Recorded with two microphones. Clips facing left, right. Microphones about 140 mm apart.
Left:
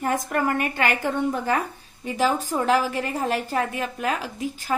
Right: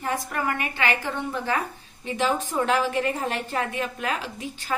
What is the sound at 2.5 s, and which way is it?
Speech, 10° left (ahead or behind).